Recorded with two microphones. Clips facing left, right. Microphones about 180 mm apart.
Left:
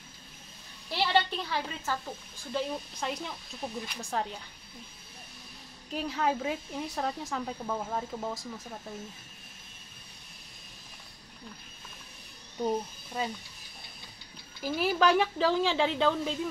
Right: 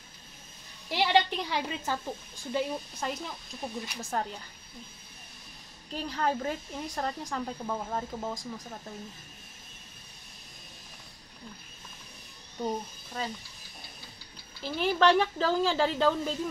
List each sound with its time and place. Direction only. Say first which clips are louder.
0.8 s a woman's voice: right 2 dB; 15° right (ahead or behind)
2.5 s speech: right 2 dB; centre (ahead or behind)
5.9 s speech: left 1 dB; 5° left (ahead or behind)
12.6 s speech: left 3 dB; 15° left (ahead or behind)
14.6 s speech: right 1 dB; 5° left (ahead or behind)